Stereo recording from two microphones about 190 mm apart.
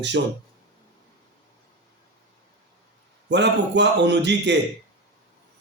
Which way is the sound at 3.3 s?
65° right (ahead or behind).